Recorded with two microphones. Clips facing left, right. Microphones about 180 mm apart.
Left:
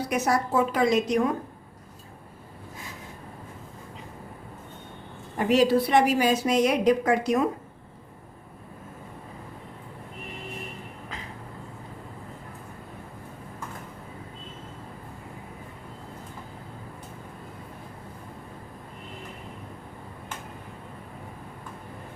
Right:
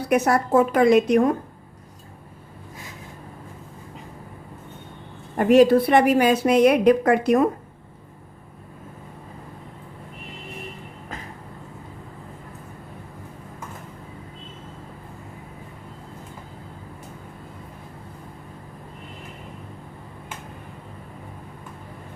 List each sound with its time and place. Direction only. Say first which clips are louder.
0.1 s a woman's voice: right 7 dB; 55° right (ahead or behind)
5.4 s a woman's voice: right 6 dB; 55° right (ahead or behind)